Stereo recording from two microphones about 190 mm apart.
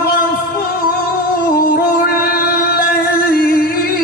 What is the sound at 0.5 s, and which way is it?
Music, 50° left (ahead or behind).